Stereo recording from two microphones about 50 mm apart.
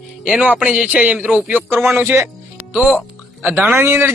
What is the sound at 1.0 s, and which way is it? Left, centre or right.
Speech, right.